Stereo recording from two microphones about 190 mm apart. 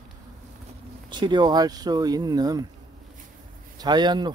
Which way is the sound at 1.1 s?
25° right (ahead or behind).